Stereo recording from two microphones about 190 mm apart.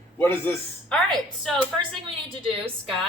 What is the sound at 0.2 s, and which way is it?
Speech, 10° left (ahead or behind).